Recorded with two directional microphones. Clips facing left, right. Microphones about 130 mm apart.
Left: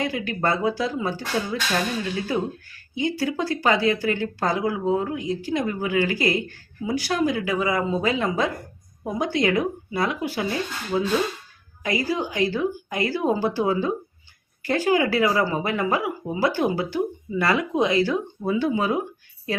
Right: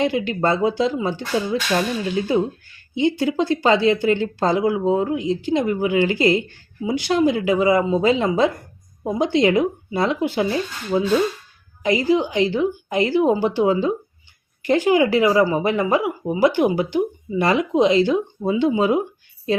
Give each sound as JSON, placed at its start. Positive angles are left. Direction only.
{"t": 0.0, "sound": "speech", "side_deg": -25}